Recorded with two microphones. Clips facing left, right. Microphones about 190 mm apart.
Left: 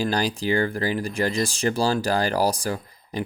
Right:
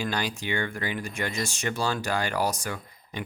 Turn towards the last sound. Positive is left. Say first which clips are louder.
# left 7 dB
turn(degrees=35)  # may be behind; listen again after turning